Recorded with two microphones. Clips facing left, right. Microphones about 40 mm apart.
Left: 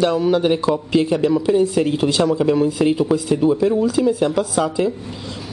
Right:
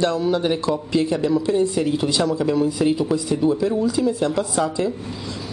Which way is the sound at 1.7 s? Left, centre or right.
Left.